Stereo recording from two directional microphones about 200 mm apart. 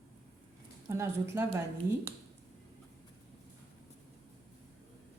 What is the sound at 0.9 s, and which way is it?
Speech, 15° right (ahead or behind).